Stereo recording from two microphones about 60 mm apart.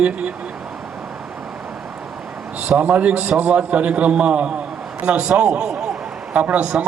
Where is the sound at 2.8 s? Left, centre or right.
Right.